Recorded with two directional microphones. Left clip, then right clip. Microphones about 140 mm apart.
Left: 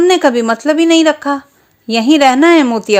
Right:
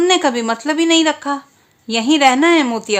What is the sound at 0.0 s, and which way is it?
Speech, 30° left (ahead or behind).